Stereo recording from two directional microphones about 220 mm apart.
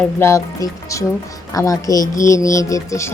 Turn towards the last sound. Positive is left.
turn(degrees=15)  # may be behind; listen again after turning